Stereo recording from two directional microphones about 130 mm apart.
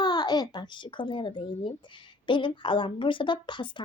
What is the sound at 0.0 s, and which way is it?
A child's voice, 30° left (ahead or behind).